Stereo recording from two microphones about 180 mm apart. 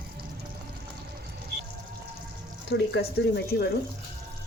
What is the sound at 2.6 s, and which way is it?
Speech, 70° left (ahead or behind).